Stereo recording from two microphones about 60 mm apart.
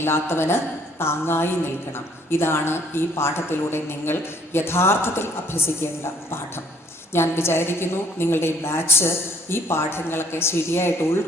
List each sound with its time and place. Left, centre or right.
0.0 s a woman's voice: left
7.1 s a woman's voice: left